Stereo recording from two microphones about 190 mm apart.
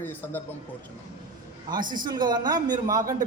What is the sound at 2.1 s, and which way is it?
Speech, 20° right (ahead or behind).